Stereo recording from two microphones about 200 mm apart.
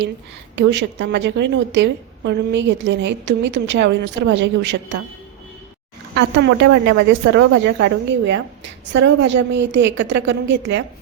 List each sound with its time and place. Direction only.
0.5 s a woman's voice: 65° right (ahead or behind)
6.1 s a woman's voice: 65° right (ahead or behind)